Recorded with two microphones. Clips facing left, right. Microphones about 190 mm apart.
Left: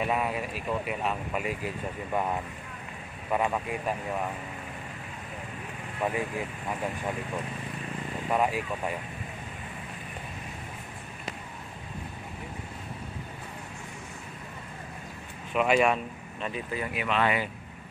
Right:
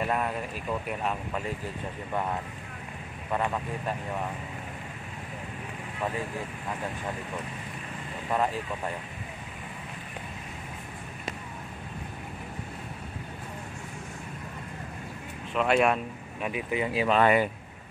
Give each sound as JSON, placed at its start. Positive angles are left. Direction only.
{"t": 0.0, "sound": "speech", "side_deg": 5}
{"t": 3.3, "sound": "speech", "side_deg": 10}
{"t": 8.3, "sound": "speech", "side_deg": 10}
{"t": 15.5, "sound": "speech", "side_deg": 5}
{"t": 16.3, "sound": "speech", "side_deg": -10}
{"t": 16.9, "sound": "speech", "side_deg": -30}
{"t": 17.2, "sound": "speech", "side_deg": -45}